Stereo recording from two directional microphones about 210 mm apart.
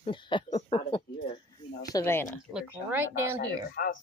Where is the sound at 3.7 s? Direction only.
45° left (ahead or behind).